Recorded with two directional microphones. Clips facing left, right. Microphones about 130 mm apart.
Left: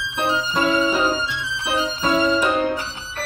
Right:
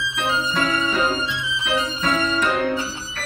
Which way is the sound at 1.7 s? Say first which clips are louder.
Left 3 dB; 25° left (ahead or behind).